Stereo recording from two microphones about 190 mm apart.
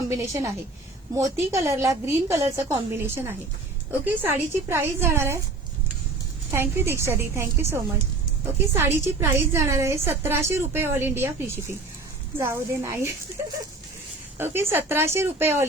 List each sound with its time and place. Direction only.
0.1 s a woman's voice: 15° right (ahead or behind)
6.5 s a woman's voice: 10° right (ahead or behind)
14.3 s a woman's voice: 10° right (ahead or behind)